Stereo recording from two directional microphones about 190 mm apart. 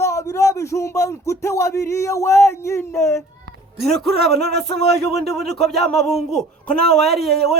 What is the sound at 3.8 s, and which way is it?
Speech, centre (ahead or behind).